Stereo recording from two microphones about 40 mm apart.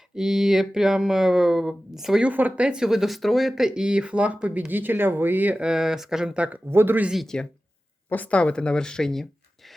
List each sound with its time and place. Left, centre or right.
0.2 s speech: centre
3.5 s speech: centre; by 4.6 s right
4.7 s speech: right
5.5 s speech: centre
6.7 s speech: right
7.3 s speech: left
8.1 s speech: left; by 9.2 s centre